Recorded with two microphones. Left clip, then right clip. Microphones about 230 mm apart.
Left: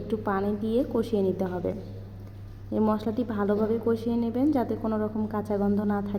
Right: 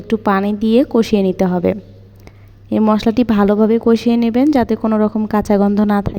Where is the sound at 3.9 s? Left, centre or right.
Right.